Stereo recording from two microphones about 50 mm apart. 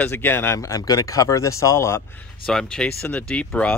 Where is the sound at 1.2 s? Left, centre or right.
Left.